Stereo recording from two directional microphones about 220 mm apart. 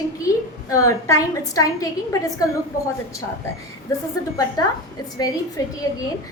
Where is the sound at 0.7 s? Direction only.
15° left (ahead or behind).